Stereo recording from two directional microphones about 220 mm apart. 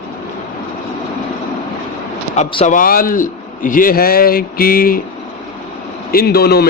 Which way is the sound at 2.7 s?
40° left (ahead or behind).